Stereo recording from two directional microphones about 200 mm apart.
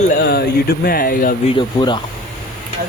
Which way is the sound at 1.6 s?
25° left (ahead or behind).